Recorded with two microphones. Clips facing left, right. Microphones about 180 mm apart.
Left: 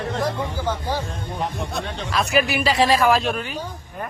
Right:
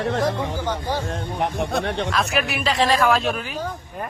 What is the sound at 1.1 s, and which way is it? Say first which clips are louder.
Speech: right 3 dB; 65° right (ahead or behind).